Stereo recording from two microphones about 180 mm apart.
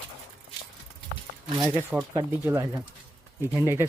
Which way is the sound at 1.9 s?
20° right (ahead or behind).